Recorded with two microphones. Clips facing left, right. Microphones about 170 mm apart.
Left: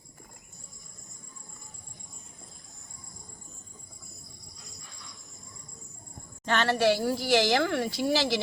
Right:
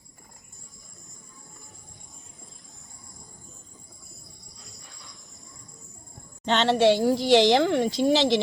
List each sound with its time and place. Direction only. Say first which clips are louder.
6.4 s speech: right 5 dB; 20° right (ahead or behind)